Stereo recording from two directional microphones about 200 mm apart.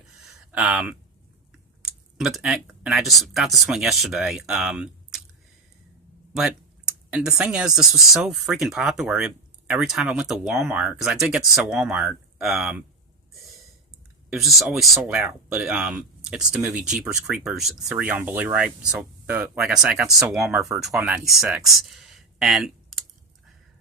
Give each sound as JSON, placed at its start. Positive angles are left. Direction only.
{"t": 0.5, "sound": "speech", "side_deg": -5}
{"t": 7.1, "sound": "speech", "side_deg": -5}
{"t": 14.3, "sound": "speech", "side_deg": 0}